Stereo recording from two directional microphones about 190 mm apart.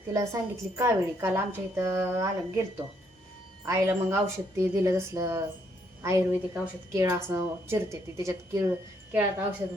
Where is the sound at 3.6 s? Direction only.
15° right (ahead or behind).